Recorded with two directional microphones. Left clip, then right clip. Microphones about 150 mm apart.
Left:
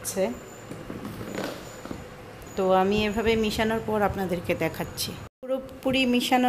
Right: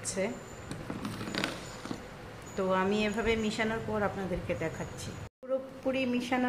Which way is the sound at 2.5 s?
40° left (ahead or behind).